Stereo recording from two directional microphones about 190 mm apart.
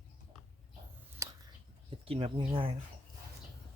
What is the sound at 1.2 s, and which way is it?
Whispering, 15° right (ahead or behind).